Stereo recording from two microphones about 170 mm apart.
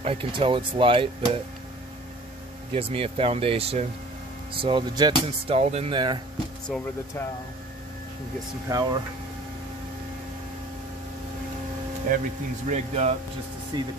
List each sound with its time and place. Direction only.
0.0 s speech: 35° right (ahead or behind)
2.7 s speech: 35° right (ahead or behind)
5.6 s speech: 40° right (ahead or behind)
6.7 s speech: centre (ahead or behind)
8.6 s speech: 25° right (ahead or behind)
12.1 s speech: 55° right (ahead or behind)
12.6 s speech: 45° right (ahead or behind)
13.7 s speech: 25° right (ahead or behind)